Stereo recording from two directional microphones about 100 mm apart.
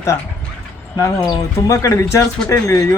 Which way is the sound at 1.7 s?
30° left (ahead or behind).